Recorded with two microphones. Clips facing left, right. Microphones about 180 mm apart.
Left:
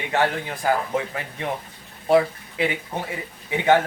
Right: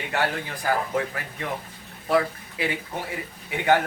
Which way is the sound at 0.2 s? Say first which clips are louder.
Left 4 dB; 20° left (ahead or behind).